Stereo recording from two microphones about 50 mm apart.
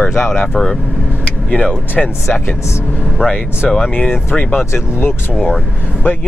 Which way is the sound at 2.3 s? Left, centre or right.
Left.